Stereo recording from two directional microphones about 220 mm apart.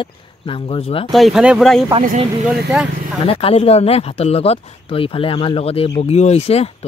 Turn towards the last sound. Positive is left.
turn(degrees=30)  # may be behind; listen again after turning